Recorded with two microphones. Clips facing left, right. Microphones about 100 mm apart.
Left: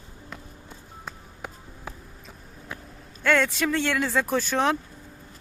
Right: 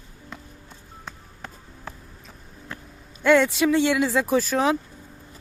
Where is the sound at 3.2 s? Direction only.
10° right (ahead or behind).